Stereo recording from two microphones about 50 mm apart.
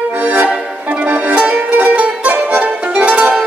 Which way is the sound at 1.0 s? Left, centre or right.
Right.